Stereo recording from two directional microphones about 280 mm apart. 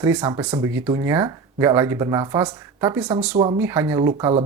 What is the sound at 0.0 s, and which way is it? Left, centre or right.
Speech, centre.